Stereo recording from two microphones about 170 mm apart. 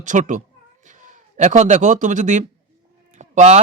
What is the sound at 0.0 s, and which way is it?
A man's voice, 45° right (ahead or behind).